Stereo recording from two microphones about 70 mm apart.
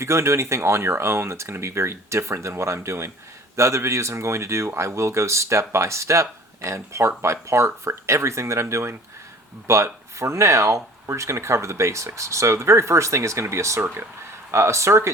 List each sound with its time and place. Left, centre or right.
0.0 s speech: right